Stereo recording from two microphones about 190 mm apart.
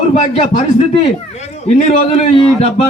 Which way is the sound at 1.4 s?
35° left (ahead or behind).